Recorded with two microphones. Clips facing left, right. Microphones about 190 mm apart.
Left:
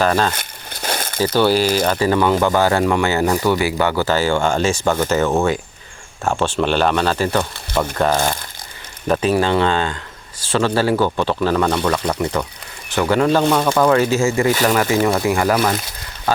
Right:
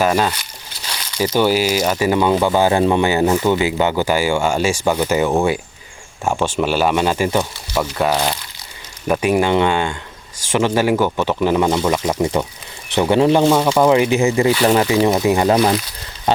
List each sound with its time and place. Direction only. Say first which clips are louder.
0.0 s speech: right 1 dB; 10° right (ahead or behind)
0.3 s crumpling: left 4 dB; 55° left (ahead or behind)
1.2 s speech: even; 10° right (ahead or behind)